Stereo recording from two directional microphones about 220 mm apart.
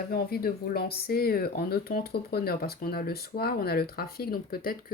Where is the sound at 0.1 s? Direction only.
45° left (ahead or behind).